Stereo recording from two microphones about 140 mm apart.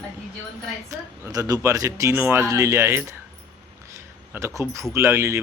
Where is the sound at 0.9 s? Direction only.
20° right (ahead or behind).